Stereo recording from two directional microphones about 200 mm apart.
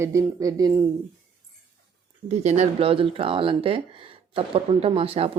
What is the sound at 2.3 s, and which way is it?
Speech, 35° right (ahead or behind).